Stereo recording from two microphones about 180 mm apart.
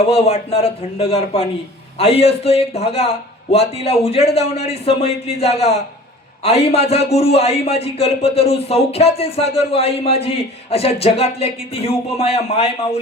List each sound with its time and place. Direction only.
0.0 s a man's voice: 35° left (ahead or behind)